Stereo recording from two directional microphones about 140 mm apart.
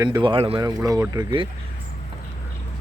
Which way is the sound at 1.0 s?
25° right (ahead or behind).